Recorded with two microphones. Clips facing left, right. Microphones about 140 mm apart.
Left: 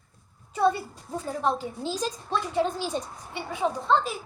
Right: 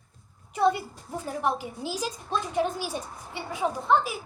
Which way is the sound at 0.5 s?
15° right (ahead or behind).